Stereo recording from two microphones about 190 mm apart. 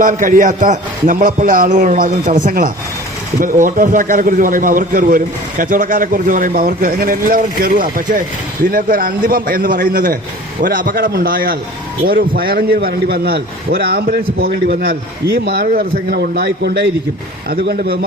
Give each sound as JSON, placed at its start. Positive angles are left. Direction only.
{"t": 0.0, "sound": "a man's voice", "side_deg": -45}